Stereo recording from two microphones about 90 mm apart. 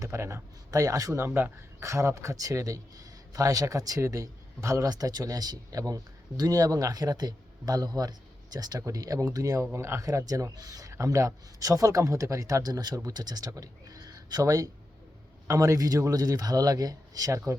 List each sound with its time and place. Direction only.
0.0 s a man's voice: 30° right (ahead or behind)